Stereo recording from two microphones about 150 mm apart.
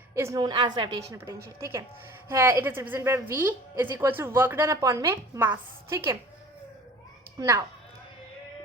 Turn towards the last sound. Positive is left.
turn(degrees=-20)  # may be behind; listen again after turning